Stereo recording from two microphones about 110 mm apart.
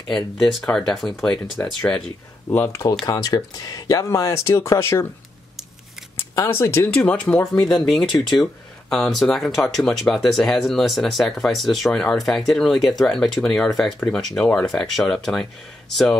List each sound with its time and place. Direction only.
0.1 s speech: centre (ahead or behind)
2.5 s speech: 25° left (ahead or behind)
6.3 s speech: 25° left (ahead or behind)
7.2 s speech: 10° left (ahead or behind)